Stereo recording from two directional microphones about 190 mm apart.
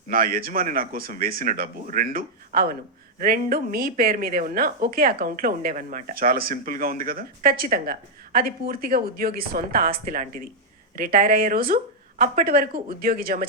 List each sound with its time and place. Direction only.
0.1 s a woman's voice: 50° right (ahead or behind)